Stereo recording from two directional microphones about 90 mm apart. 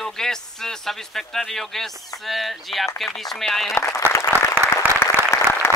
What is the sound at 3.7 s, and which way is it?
Applause, 30° left (ahead or behind).